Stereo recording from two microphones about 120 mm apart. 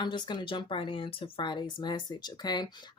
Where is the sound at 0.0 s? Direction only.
40° left (ahead or behind).